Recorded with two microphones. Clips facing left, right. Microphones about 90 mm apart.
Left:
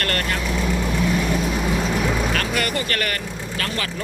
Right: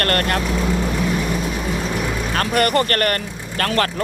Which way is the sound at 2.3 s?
50° right (ahead or behind).